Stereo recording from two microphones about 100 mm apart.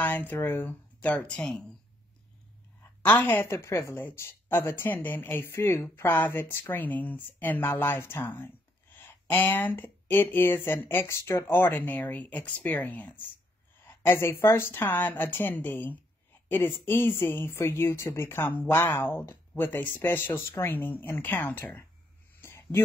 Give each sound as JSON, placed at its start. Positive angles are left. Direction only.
{"t": 0.0, "sound": "speech", "side_deg": 20}
{"t": 3.0, "sound": "speech", "side_deg": 20}
{"t": 22.4, "sound": "a sound", "side_deg": 20}